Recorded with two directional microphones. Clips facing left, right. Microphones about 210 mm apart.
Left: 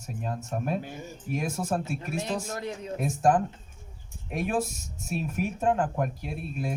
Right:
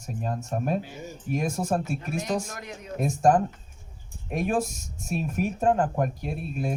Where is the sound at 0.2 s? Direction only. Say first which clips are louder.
Right 3 dB; 45° right (ahead or behind).